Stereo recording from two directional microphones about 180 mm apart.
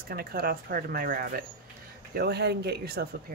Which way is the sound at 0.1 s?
55° right (ahead or behind).